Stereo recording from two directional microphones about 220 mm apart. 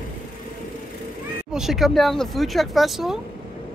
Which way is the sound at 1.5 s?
Centre (ahead or behind).